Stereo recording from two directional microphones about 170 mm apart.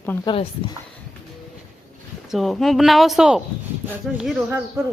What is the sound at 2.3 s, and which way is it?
A woman's voice, centre (ahead or behind).